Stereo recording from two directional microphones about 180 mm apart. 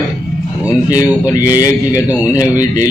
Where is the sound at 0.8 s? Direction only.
20° left (ahead or behind).